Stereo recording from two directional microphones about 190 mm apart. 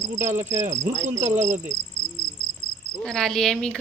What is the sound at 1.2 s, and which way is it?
Cricket, 35° right (ahead or behind).